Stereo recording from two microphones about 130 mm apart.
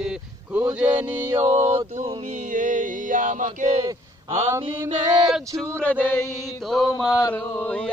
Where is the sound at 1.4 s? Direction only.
60° right (ahead or behind).